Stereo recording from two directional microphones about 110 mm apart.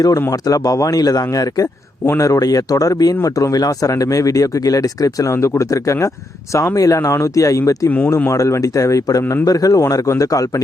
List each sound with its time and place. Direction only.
0.0 s speech: 35° left (ahead or behind)
7.9 s speech: 15° left (ahead or behind)
8.1 s speech: 30° left (ahead or behind)